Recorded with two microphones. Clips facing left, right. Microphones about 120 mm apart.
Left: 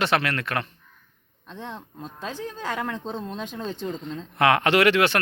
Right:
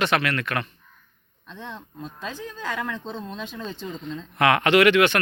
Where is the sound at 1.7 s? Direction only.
35° left (ahead or behind).